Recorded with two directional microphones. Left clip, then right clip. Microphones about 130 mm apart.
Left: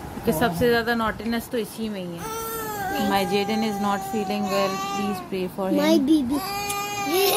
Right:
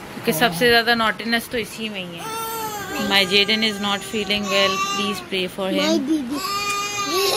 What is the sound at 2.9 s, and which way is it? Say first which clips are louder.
Speech: right 6 dB; 20° left (ahead or behind).